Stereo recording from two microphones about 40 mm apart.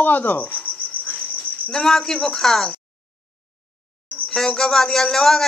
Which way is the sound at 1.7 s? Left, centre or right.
Centre.